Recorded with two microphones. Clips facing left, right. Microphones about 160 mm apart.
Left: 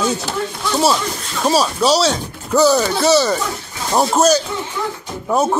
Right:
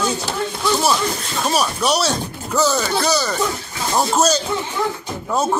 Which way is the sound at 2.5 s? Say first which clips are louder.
Left 5 dB; 15° left (ahead or behind).